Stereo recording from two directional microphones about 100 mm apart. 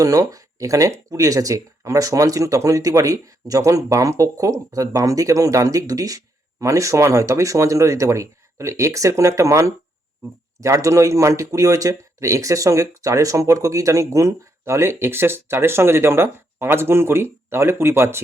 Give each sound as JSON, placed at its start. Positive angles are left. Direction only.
{"t": 0.0, "sound": "speech", "side_deg": -35}